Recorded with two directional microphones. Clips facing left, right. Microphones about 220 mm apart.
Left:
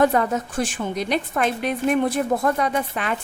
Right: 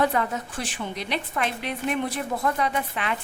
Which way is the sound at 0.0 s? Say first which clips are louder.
Left 5 dB; 45° left (ahead or behind).